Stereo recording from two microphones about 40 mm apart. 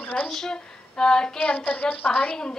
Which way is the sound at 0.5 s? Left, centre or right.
Centre.